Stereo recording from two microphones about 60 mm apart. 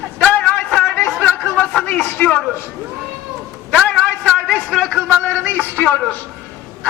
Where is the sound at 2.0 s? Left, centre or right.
Left.